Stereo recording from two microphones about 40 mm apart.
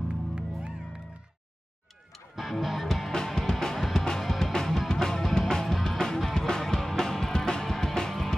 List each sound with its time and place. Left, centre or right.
0.1 s music: right
2.1 s music: centre
3.1 s music: centre